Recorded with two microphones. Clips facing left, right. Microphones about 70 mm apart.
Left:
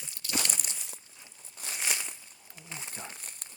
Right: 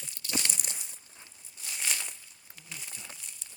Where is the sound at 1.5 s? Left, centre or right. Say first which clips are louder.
Left 3 dB; left.